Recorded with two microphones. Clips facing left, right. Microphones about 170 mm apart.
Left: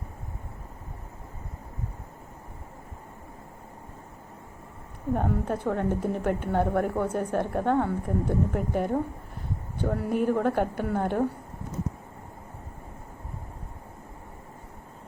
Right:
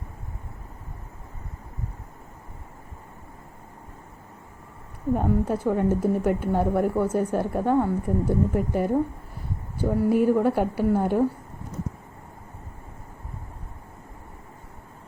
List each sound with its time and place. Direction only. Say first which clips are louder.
5.1 s a woman's voice: right 4 dB; 5° right (ahead or behind)